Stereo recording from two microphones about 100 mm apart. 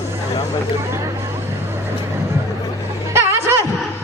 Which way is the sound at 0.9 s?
30° right (ahead or behind).